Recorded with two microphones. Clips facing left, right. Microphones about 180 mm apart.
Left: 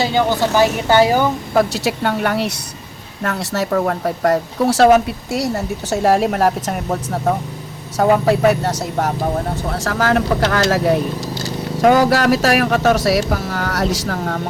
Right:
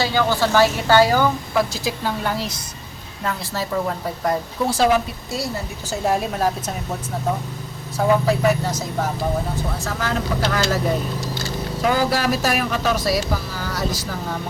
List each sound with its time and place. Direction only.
0.0 s a woman's voice: 20° left (ahead or behind)
1.5 s speech: 70° left (ahead or behind)
7.9 s speech: 70° left (ahead or behind)
9.7 s speech: 90° left
11.8 s speech: 75° left (ahead or behind)
12.7 s speech: 55° left (ahead or behind)
13.0 s speech: 75° left (ahead or behind)